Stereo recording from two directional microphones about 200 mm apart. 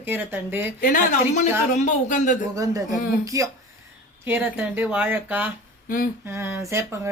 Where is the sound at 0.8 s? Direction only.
40° left (ahead or behind).